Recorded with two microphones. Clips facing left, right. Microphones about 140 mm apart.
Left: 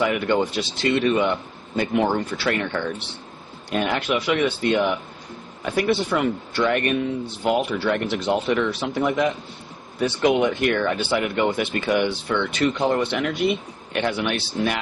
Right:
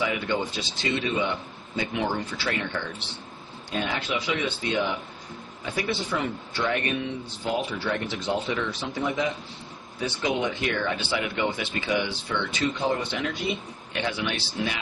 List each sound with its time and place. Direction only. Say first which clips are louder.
0.0 s speech: left 6 dB; 60° left (ahead or behind)
1.7 s speech: left 7 dB; 50° left (ahead or behind)